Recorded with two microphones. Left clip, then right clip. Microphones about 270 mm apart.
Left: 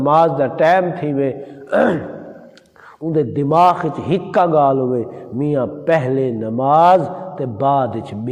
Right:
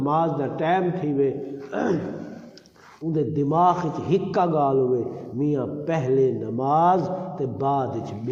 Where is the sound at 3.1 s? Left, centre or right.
Left.